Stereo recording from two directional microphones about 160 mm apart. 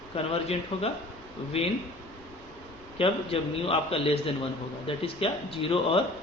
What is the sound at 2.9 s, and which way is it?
A man's voice, 35° left (ahead or behind).